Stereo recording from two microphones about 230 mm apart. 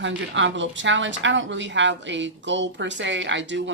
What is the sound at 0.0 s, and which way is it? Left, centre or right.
A woman's voice, right.